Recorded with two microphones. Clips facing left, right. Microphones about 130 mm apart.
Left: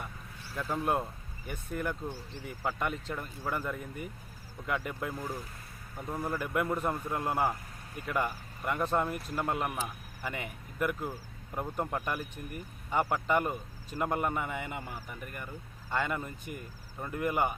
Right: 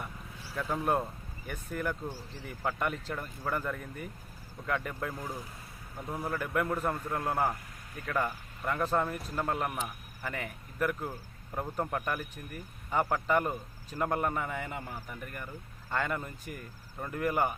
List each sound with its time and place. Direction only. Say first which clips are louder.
0.5 s speech: right 1 dB; centre (ahead or behind)
6.2 s speech: even; 5° left (ahead or behind)
9.7 s a man's voice: even; centre (ahead or behind)
10.3 s a man's voice: even; 15° left (ahead or behind)